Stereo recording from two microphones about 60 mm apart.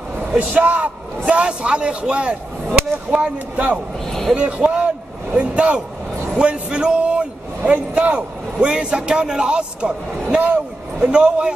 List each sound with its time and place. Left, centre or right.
0.5 s a man's voice: right
4.1 s a sound: centre
4.4 s a man's voice: centre